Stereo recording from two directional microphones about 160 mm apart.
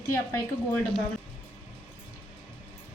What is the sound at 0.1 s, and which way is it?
Speech, 15° left (ahead or behind).